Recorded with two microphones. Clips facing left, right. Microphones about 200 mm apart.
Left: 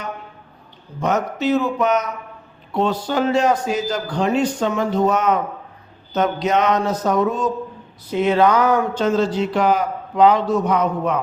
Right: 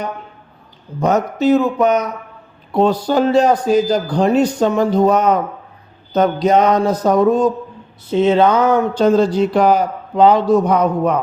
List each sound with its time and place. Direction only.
0.9 s a man's voice: 35° right (ahead or behind)
8.0 s speech: 25° right (ahead or behind)
9.0 s a man's voice: 35° right (ahead or behind)